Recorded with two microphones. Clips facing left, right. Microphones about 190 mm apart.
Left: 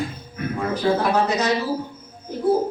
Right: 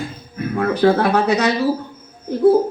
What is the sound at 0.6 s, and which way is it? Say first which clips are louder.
A man's voice: right 6 dB; 65° right (ahead or behind).